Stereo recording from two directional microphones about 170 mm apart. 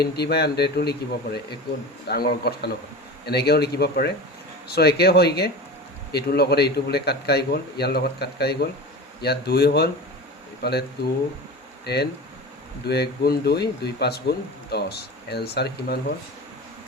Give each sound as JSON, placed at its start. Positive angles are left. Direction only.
{"t": 0.0, "sound": "a man's voice", "side_deg": 70}
{"t": 11.9, "sound": "a man's voice", "side_deg": 75}